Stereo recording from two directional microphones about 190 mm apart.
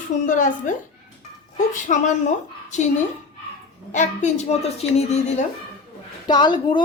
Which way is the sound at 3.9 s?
40° left (ahead or behind).